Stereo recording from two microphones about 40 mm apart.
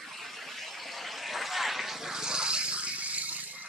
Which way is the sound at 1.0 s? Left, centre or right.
Centre.